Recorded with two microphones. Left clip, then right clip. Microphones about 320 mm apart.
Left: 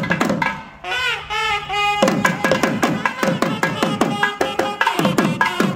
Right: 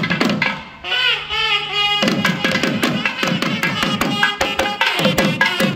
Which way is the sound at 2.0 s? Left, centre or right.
Centre.